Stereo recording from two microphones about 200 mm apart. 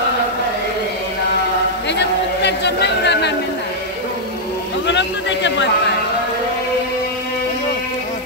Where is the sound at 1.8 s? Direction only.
60° left (ahead or behind).